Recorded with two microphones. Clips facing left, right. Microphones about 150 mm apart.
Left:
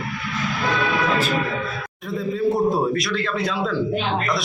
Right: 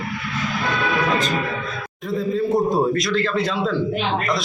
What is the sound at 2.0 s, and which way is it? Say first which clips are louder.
A man's voice: right 2 dB; centre (ahead or behind).